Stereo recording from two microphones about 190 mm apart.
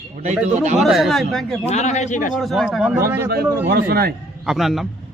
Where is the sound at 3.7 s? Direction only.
55° right (ahead or behind).